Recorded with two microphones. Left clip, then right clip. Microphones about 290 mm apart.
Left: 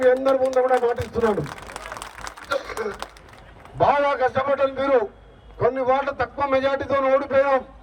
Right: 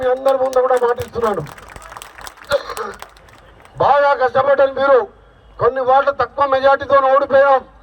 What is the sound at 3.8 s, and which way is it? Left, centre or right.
A man's voice, centre.